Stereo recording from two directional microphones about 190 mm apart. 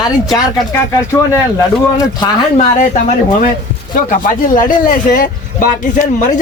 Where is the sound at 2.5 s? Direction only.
40° left (ahead or behind).